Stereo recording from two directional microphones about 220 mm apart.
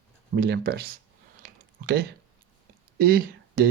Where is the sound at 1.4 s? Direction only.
45° right (ahead or behind).